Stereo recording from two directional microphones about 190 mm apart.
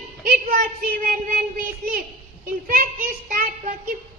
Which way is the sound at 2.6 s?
45° right (ahead or behind).